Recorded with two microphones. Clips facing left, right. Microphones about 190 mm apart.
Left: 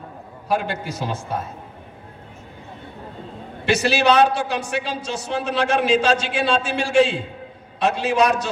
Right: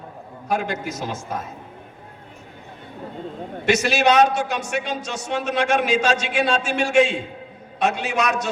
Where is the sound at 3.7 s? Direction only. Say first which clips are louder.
Even; 30° left (ahead or behind).